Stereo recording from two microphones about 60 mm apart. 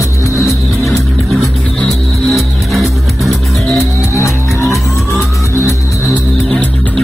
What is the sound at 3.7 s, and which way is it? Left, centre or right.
Music, left.